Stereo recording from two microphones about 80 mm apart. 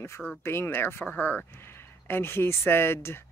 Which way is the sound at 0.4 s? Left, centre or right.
Left.